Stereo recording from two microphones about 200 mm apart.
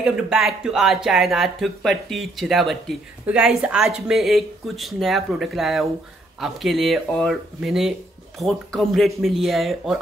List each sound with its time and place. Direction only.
0.0 s speech: centre (ahead or behind)